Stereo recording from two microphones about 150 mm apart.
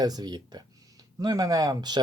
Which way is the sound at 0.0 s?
25° right (ahead or behind).